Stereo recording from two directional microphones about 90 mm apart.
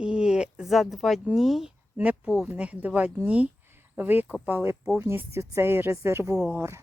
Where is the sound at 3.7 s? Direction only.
25° right (ahead or behind).